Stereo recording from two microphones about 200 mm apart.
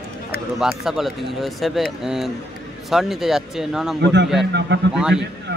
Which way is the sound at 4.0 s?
60° right (ahead or behind).